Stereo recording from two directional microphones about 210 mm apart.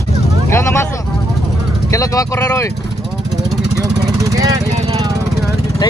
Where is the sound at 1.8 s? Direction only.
15° left (ahead or behind).